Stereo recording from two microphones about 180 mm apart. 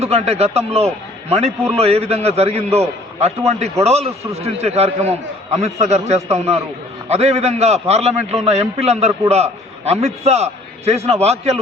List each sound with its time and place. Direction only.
0.0 s a man's voice: 35° right (ahead or behind)